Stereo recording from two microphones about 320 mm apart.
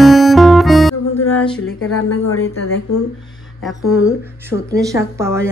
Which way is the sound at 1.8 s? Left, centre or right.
Left.